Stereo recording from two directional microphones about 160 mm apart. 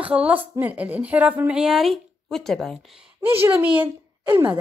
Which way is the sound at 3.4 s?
10° right (ahead or behind).